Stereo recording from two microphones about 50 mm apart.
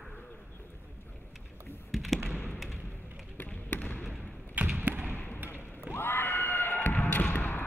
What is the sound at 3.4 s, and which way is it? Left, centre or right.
Basketball bounce, left.